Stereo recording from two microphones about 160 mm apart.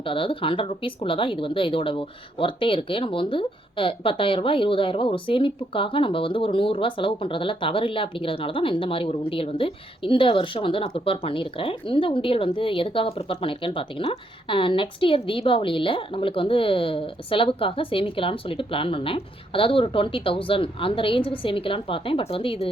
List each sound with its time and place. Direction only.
0.0 s speech: 35° left (ahead or behind)